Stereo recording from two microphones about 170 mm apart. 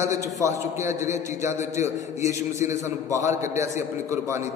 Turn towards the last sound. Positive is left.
turn(degrees=-15)  # may be behind; listen again after turning